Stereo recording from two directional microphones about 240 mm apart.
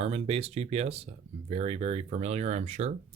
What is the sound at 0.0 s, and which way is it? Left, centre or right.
Speech, right.